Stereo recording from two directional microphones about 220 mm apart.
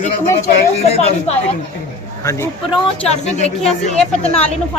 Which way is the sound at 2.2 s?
15° left (ahead or behind).